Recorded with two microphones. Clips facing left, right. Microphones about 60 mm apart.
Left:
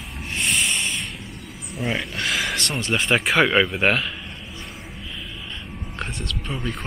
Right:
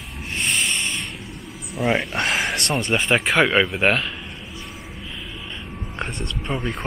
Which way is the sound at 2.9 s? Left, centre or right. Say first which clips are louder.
Even; centre.